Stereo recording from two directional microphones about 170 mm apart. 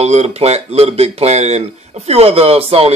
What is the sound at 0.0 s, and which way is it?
Speech, 40° right (ahead or behind).